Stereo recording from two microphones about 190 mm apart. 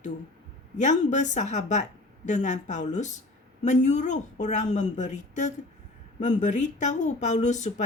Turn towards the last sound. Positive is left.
turn(degrees=40)  # may be behind; listen again after turning